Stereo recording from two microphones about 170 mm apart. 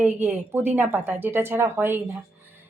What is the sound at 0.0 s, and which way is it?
A woman's voice, 10° right (ahead or behind).